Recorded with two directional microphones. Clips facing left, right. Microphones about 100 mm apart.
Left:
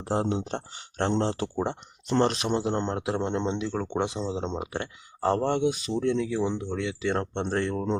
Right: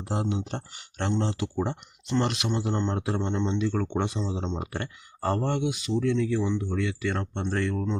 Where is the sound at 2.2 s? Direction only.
35° left (ahead or behind).